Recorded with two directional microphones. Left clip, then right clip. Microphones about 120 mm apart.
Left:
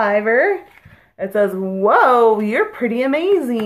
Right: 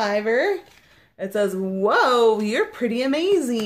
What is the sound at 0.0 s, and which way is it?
Speech, 45° right (ahead or behind).